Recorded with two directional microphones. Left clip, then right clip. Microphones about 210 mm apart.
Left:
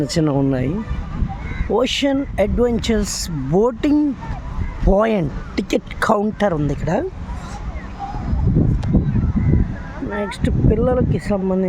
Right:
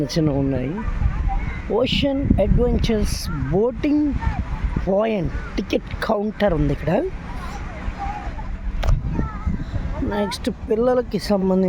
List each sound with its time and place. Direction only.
0.0 s speech: 10° left (ahead or behind)
1.7 s speech: 15° left (ahead or behind)
6.5 s speech: centre (ahead or behind)
10.1 s speech: 5° right (ahead or behind)